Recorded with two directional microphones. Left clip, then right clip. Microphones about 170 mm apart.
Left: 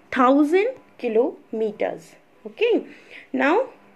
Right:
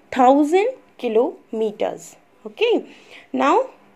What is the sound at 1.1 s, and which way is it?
A woman's voice, 30° right (ahead or behind).